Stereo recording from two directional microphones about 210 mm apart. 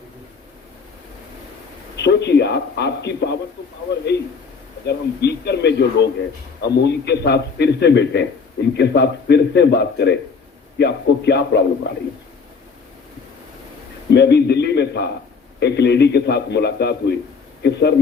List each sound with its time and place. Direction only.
2.0 s a man's voice: 55° left (ahead or behind)
14.1 s a man's voice: 55° left (ahead or behind)